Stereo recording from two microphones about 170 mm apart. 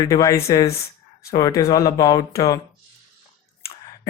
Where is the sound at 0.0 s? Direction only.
20° left (ahead or behind).